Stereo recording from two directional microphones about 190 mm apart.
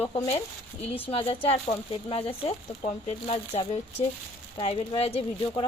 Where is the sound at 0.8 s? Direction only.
30° left (ahead or behind).